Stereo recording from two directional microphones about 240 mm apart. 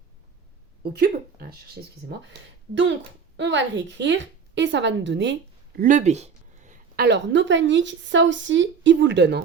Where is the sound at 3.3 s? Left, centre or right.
Right.